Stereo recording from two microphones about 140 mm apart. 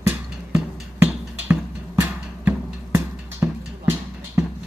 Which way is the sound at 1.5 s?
15° right (ahead or behind).